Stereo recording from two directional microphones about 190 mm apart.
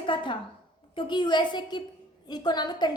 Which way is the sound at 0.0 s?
25° left (ahead or behind).